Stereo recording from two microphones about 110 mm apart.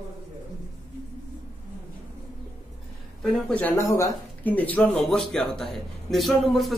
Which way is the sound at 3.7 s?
30° left (ahead or behind).